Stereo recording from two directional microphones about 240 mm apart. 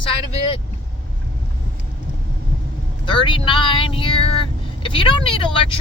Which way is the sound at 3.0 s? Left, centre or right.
Centre.